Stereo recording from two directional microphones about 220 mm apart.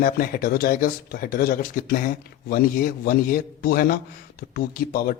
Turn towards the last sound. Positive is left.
turn(degrees=40)  # may be behind; listen again after turning